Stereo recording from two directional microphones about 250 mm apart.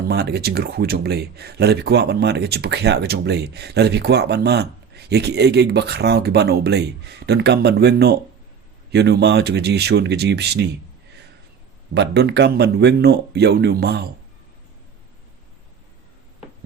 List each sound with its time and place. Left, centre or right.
0.1 s speech: right
11.9 s speech: right